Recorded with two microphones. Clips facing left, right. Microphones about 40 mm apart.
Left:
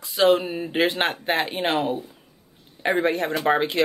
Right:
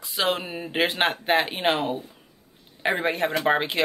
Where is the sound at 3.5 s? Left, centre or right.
Centre.